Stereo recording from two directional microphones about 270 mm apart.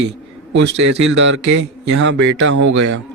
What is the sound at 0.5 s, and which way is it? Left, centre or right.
A man's voice, right.